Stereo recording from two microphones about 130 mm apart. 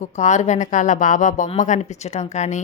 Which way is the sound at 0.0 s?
65° left (ahead or behind).